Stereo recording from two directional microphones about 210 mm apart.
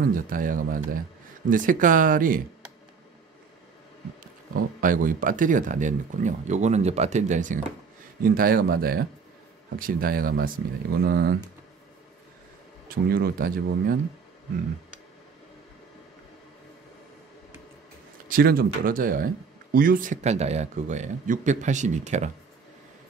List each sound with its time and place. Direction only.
0.0 s speech: 40° right (ahead or behind)
4.2 s speech: 40° right (ahead or behind)
12.8 s speech: 45° right (ahead or behind)
18.3 s speech: 45° right (ahead or behind)